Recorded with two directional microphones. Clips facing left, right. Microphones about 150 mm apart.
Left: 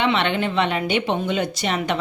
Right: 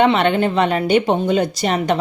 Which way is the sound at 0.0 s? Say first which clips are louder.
Right 6 dB; 45° right (ahead or behind).